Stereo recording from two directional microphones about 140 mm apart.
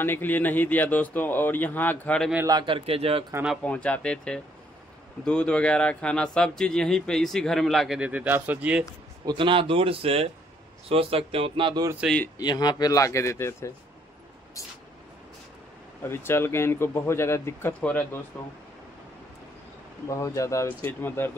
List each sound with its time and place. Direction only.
0.0 s a man's voice: 15° left (ahead or behind)
2.4 s speech: 35° right (ahead or behind)
3.6 s a man's voice: 10° left (ahead or behind); by 8.8 s 10° right (ahead or behind)
9.2 s speech: 35° right (ahead or behind)
12.0 s speech: 5° right (ahead or behind)
12.4 s speech: 30° left (ahead or behind)
16.0 s a man's voice: 15° left (ahead or behind)
20.1 s speech: 20° left (ahead or behind)